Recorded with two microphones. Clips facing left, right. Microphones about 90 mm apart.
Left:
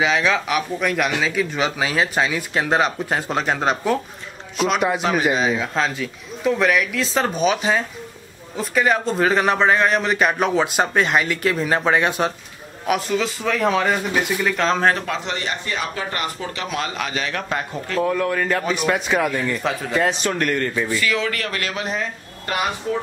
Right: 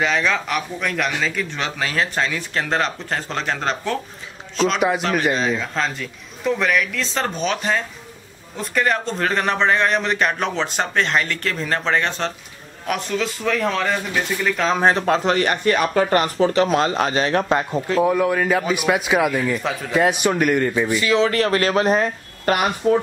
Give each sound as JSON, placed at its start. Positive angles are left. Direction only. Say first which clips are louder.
{"t": 0.0, "sound": "a man's voice", "louder": "left 1 dB", "side_deg": 5}
{"t": 15.0, "sound": "a man's voice", "louder": "right 8 dB", "side_deg": -40}
{"t": 15.3, "sound": "speech", "louder": "right 7 dB", "side_deg": -55}
{"t": 16.1, "sound": "speech", "louder": "right 9 dB", "side_deg": -35}